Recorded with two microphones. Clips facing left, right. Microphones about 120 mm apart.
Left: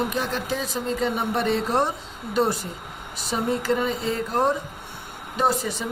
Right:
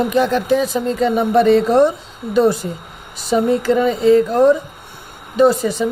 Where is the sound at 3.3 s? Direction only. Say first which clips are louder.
Right 9 dB; 90° right.